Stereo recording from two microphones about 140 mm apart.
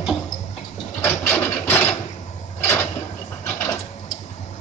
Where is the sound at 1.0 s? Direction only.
15° left (ahead or behind).